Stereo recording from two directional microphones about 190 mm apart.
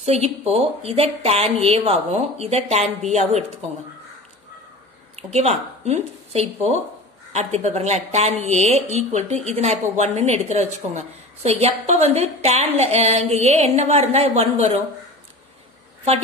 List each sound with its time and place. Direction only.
0.0 s a woman's voice: 35° right (ahead or behind)
5.1 s a woman's voice: 35° right (ahead or behind)